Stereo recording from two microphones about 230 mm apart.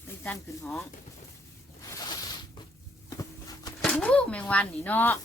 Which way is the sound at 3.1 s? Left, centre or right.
Centre.